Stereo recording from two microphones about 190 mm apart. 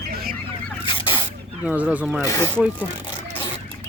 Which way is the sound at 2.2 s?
15° left (ahead or behind).